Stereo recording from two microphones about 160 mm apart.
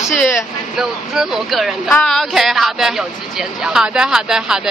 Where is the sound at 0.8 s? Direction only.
5° right (ahead or behind).